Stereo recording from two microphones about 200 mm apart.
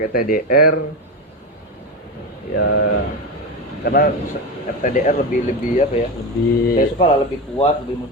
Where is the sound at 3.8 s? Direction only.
45° left (ahead or behind).